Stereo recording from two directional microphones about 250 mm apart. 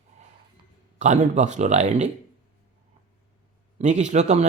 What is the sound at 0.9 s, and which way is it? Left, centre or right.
Speech, right.